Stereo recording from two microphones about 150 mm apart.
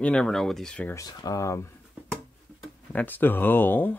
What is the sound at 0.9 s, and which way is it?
Speech, 25° left (ahead or behind).